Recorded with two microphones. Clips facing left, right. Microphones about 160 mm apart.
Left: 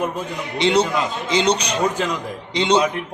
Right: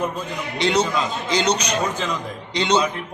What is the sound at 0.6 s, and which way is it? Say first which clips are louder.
Speech: left 3 dB; 30° left (ahead or behind).